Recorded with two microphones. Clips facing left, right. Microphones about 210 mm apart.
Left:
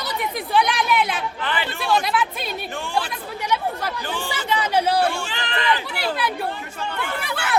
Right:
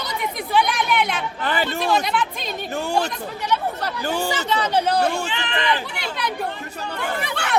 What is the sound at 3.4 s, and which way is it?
Chatter, 10° left (ahead or behind).